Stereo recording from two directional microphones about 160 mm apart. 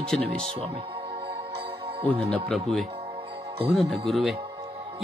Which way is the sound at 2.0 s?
5° left (ahead or behind).